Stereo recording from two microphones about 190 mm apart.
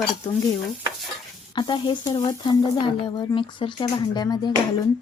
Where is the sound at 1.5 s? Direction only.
25° left (ahead or behind).